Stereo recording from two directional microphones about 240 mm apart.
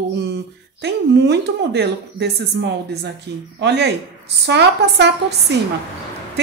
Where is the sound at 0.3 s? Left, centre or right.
Right.